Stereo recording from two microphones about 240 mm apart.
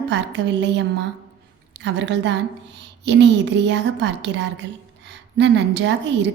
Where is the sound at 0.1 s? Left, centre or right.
Right.